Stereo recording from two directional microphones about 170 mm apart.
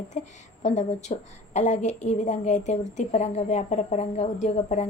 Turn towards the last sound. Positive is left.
turn(degrees=40)  # may be behind; listen again after turning